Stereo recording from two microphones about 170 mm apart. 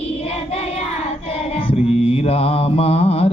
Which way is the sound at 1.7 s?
35° left (ahead or behind).